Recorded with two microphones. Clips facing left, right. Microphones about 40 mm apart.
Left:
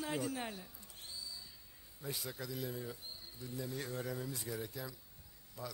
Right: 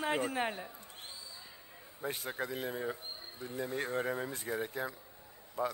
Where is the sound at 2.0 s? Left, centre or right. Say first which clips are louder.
Right 6 dB; right.